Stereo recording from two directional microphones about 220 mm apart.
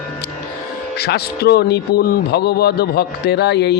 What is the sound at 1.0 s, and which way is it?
A man's voice, 45° left (ahead or behind).